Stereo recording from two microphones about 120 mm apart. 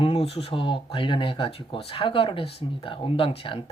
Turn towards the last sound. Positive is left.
turn(degrees=50)  # may be behind; listen again after turning